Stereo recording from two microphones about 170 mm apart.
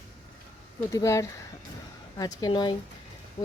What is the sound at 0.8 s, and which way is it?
A woman's voice, 15° left (ahead or behind).